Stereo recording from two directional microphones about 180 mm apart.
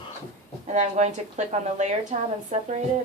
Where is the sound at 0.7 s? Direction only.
40° right (ahead or behind).